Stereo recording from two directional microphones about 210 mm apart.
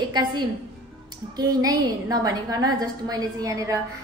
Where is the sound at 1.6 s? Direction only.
15° right (ahead or behind).